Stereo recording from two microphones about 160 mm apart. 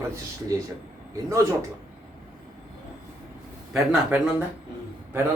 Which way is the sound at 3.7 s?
5° right (ahead or behind).